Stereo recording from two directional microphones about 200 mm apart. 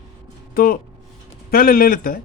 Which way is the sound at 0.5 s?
45° left (ahead or behind).